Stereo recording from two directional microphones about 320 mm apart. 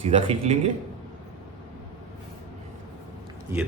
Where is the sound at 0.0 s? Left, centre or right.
Centre.